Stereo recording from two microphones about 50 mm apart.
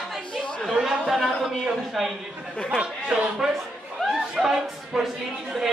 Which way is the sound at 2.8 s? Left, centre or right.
Centre.